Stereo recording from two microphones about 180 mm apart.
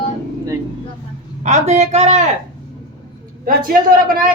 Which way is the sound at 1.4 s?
40° right (ahead or behind).